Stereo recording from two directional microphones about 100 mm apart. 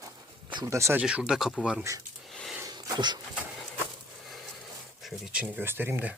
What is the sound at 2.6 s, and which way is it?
Sneeze, 45° right (ahead or behind).